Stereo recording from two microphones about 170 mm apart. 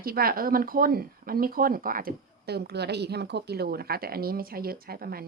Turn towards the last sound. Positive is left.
turn(degrees=-60)  # may be behind; listen again after turning